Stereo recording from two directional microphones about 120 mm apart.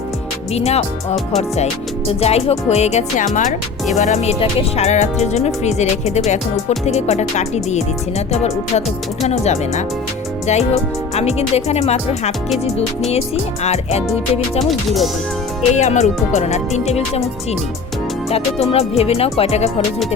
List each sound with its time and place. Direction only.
0.5 s speech: 60° left (ahead or behind)
2.0 s speech: 60° left (ahead or behind); by 3.5 s 90° left
3.9 s speech: 70° left (ahead or behind)
14.6 s speech: centre (ahead or behind)
15.7 s speech: 70° left (ahead or behind)
18.7 s speech: 55° left (ahead or behind)